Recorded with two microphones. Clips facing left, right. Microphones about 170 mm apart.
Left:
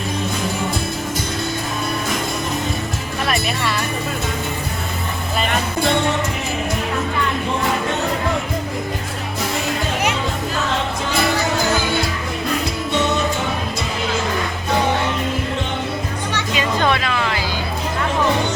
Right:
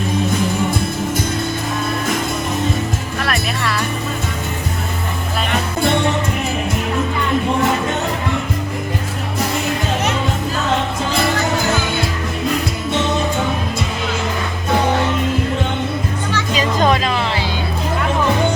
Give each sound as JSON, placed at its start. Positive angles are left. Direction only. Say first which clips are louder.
{"t": 3.2, "sound": "music", "louder": "even", "side_deg": 0}
{"t": 16.6, "sound": "music", "louder": "right 3 dB", "side_deg": -35}